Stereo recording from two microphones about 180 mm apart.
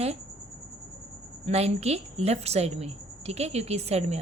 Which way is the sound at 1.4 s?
35° right (ahead or behind).